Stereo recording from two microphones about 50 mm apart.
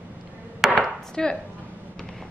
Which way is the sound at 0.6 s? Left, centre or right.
Centre.